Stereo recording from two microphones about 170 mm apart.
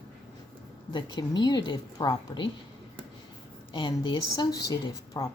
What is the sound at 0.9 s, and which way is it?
A woman's voice, 25° left (ahead or behind).